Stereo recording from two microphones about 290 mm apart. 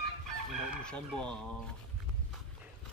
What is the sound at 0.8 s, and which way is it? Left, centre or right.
Speech, centre.